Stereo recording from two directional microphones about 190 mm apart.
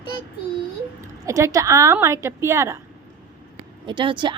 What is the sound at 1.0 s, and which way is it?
A woman's voice, 15° right (ahead or behind).